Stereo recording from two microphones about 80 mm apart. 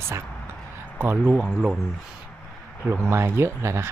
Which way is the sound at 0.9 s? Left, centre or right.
Right.